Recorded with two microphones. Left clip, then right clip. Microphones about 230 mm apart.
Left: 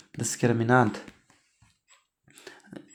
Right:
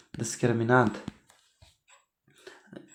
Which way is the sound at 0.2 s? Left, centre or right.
Left.